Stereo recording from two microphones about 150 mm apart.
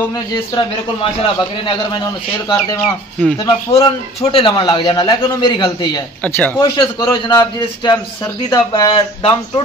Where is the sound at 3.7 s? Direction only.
25° left (ahead or behind).